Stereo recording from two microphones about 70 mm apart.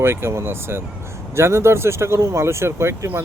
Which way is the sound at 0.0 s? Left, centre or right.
Right.